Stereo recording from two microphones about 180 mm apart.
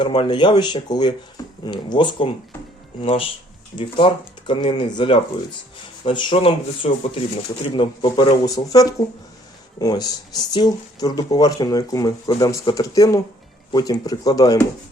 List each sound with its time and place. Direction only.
0.0 s speech: 25° left (ahead or behind)